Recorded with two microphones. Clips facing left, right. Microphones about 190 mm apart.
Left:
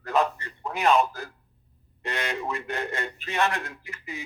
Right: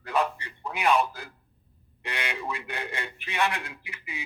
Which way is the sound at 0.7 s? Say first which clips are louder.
Left 2 dB; 35° left (ahead or behind).